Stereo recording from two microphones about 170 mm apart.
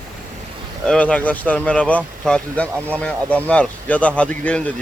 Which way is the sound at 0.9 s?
5° left (ahead or behind).